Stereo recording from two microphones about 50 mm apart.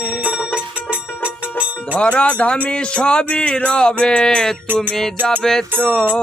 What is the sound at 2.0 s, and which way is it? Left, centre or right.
Speech, left.